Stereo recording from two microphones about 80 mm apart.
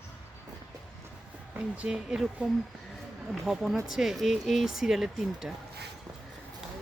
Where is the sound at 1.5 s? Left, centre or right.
Centre.